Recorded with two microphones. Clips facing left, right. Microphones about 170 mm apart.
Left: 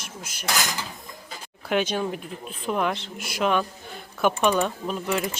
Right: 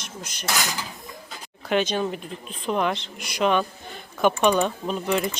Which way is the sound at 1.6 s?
10° left (ahead or behind).